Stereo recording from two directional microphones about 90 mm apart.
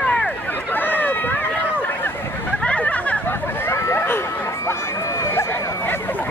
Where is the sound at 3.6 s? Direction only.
30° left (ahead or behind).